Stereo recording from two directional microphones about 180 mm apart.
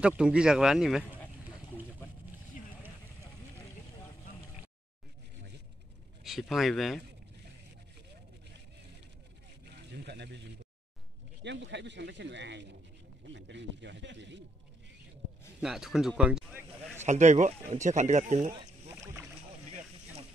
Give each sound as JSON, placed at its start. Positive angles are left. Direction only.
{"t": 0.0, "sound": "speech", "side_deg": -5}
{"t": 6.2, "sound": "speech", "side_deg": 0}
{"t": 9.8, "sound": "a sound", "side_deg": -70}
{"t": 11.4, "sound": "speech", "side_deg": -80}
{"t": 15.6, "sound": "a sound", "side_deg": 0}
{"t": 17.0, "sound": "speech", "side_deg": -40}